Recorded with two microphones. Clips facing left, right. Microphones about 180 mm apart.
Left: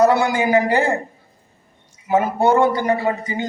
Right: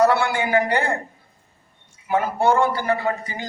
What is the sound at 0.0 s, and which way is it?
Speech, 20° left (ahead or behind).